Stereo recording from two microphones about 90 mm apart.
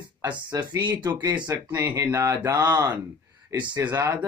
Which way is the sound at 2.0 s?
35° right (ahead or behind).